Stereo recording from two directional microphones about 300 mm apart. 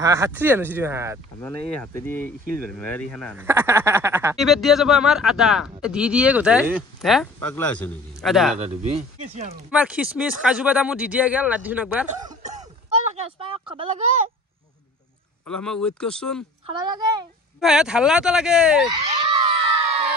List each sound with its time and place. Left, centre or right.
0.0 s speech: centre
1.4 s speech: centre
8.5 s speech: right
9.7 s speech: centre
12.5 s a sound: centre
15.5 s speech: centre
16.6 s speech: centre
17.6 s speech: centre
19.4 s children shouting: centre